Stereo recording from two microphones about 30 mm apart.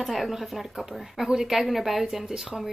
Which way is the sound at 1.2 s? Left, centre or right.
Centre.